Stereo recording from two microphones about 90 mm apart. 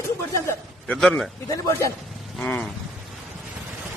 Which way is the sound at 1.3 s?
35° left (ahead or behind).